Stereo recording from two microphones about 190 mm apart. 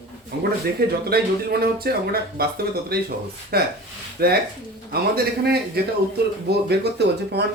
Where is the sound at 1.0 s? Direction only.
55° right (ahead or behind).